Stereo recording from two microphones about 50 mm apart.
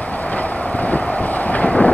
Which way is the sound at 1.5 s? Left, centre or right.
Left.